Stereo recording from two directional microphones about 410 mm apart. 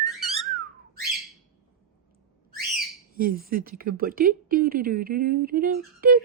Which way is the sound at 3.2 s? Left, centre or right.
Right.